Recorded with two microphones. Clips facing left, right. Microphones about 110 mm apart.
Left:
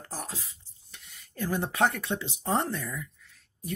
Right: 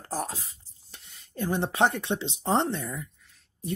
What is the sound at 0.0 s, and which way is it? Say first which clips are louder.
Speech: right 6 dB; 40° right (ahead or behind).